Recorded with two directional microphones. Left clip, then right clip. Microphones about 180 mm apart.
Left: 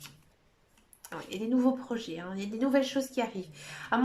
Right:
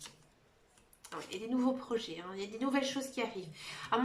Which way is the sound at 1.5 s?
35° left (ahead or behind).